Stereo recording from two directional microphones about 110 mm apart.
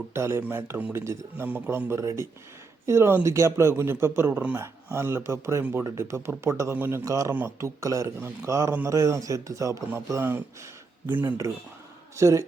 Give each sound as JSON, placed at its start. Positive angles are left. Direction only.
{"t": 0.1, "sound": "speech", "side_deg": -25}
{"t": 12.1, "sound": "speech", "side_deg": -25}